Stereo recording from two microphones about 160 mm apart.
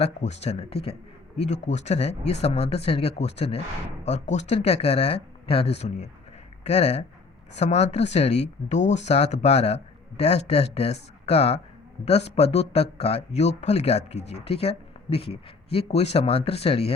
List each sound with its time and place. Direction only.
0.0 s speech: 45° left (ahead or behind)